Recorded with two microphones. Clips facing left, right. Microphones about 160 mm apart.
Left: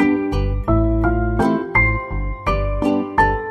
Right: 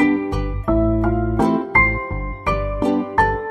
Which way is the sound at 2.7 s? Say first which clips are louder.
Left 1 dB; centre (ahead or behind).